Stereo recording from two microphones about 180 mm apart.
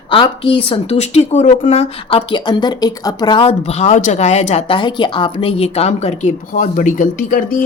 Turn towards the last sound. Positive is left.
turn(degrees=50)  # may be behind; listen again after turning